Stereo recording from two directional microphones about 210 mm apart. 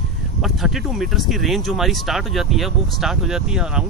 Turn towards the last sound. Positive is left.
turn(degrees=-5)  # may be behind; listen again after turning